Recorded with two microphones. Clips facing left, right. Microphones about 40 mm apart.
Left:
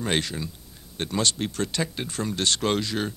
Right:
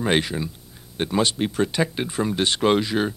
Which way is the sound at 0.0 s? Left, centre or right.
Centre.